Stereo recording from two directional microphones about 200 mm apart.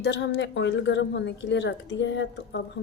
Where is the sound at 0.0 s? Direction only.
60° left (ahead or behind).